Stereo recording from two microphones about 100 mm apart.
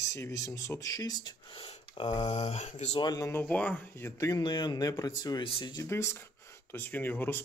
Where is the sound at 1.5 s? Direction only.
65° left (ahead or behind).